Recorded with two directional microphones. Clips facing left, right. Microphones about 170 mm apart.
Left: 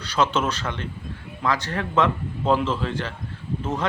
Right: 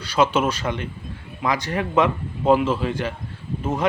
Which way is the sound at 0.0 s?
10° right (ahead or behind).